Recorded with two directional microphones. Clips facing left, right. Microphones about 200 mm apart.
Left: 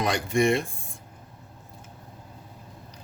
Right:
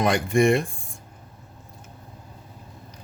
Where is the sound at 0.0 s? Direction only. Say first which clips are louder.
Right 4 dB; 50° right (ahead or behind).